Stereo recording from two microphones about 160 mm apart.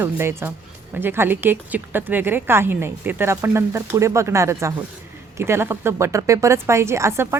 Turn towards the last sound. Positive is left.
turn(degrees=-15)  # may be behind; listen again after turning